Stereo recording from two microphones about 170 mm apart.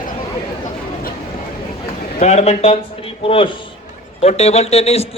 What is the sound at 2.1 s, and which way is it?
A man's voice, 40° left (ahead or behind).